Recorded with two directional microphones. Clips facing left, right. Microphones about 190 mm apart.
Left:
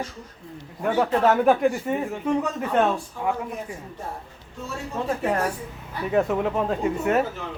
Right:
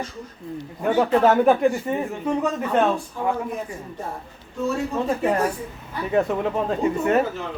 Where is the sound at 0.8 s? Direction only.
Centre (ahead or behind).